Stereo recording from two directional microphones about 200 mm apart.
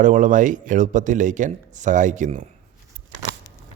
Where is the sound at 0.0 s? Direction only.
40° right (ahead or behind).